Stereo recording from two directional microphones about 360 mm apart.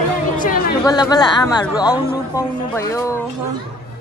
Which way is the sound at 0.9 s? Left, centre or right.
Centre.